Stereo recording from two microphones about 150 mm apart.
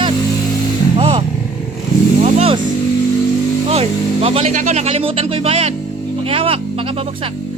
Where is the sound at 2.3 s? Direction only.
40° right (ahead or behind).